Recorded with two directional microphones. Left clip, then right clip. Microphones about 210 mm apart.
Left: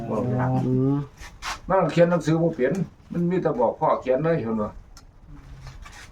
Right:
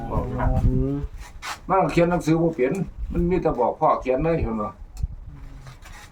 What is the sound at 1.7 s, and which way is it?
A man's voice, 5° right (ahead or behind).